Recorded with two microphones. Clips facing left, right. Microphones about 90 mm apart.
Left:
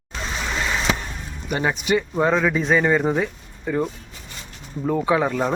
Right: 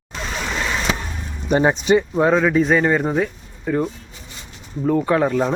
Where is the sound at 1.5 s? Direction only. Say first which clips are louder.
Right 7 dB; 30° right (ahead or behind).